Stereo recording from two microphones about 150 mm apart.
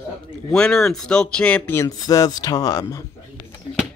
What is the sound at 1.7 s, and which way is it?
Speech, 25° left (ahead or behind).